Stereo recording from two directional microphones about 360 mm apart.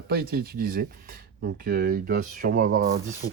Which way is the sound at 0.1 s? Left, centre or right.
Right.